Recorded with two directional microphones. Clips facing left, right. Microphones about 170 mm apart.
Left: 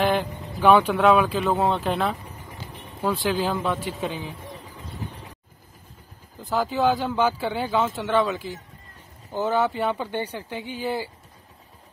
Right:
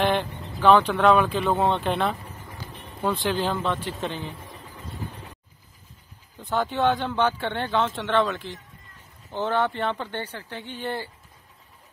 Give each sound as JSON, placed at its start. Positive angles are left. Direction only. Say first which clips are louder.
{"t": 0.0, "sound": "a sound", "louder": "left 1 dB", "side_deg": 0}
{"t": 0.6, "sound": "speech", "louder": "left 1 dB", "side_deg": 10}
{"t": 2.5, "sound": "music", "louder": "left 1 dB", "side_deg": 20}
{"t": 3.0, "sound": "speech", "louder": "left 1 dB", "side_deg": 5}
{"t": 6.4, "sound": "speech", "louder": "left 1 dB", "side_deg": 0}